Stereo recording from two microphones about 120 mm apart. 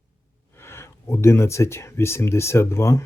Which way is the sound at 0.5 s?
20° left (ahead or behind).